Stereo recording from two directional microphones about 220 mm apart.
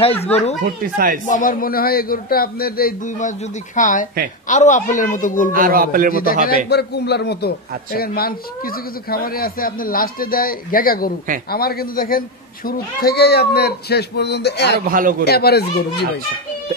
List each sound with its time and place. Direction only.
0.0 s speech: 25° left (ahead or behind)
0.9 s a man's voice: 40° right (ahead or behind)
1.2 s speech: 35° left (ahead or behind)
5.5 s a man's voice: 40° right (ahead or behind)
6.4 s a man's voice: 45° left (ahead or behind)
14.9 s a man's voice: 40° right (ahead or behind)
15.2 s a man's voice: 45° left (ahead or behind)